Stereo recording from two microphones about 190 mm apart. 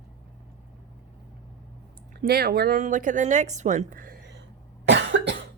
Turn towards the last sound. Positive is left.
turn(degrees=-75)  # may be behind; listen again after turning